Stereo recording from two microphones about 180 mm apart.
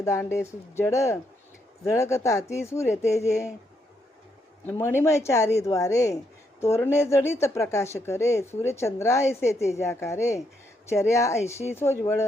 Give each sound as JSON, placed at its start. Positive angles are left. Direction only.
{"t": 0.0, "sound": "speech", "side_deg": 15}
{"t": 4.6, "sound": "speech", "side_deg": 10}